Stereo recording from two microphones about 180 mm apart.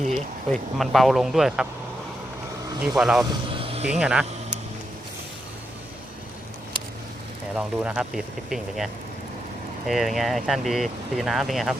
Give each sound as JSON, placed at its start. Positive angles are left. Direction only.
{"t": 0.1, "sound": "speech", "side_deg": 0}
{"t": 2.8, "sound": "speech", "side_deg": -5}
{"t": 3.6, "sound": "music", "side_deg": -30}
{"t": 3.8, "sound": "speech", "side_deg": -5}
{"t": 7.5, "sound": "speech", "side_deg": -5}